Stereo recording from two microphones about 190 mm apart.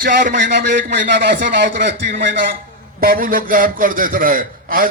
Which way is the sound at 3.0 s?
50° right (ahead or behind).